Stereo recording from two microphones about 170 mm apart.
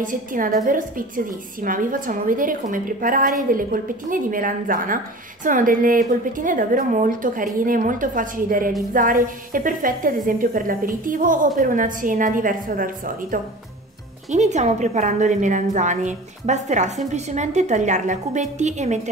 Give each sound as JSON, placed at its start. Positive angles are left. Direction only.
{"t": 0.0, "sound": "a woman's voice", "side_deg": -50}
{"t": 14.3, "sound": "a woman's voice", "side_deg": -45}